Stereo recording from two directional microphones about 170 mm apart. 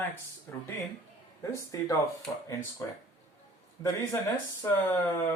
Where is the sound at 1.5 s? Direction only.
20° left (ahead or behind).